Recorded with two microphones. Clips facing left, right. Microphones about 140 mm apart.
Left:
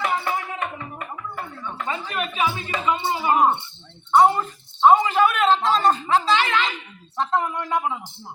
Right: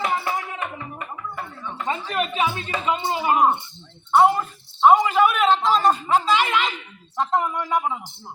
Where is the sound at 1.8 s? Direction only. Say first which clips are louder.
Right 3 dB; 35° right (ahead or behind).